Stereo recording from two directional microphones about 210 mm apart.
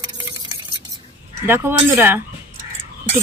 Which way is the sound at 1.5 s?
10° right (ahead or behind).